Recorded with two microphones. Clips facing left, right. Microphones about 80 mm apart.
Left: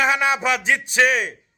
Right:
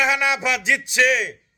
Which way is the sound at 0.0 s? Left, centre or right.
Left.